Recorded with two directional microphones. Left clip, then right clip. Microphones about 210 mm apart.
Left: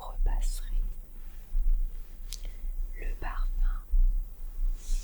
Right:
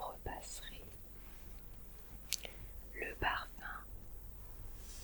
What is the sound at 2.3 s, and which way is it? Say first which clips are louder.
Chewing: right 4 dB; 25° right (ahead or behind).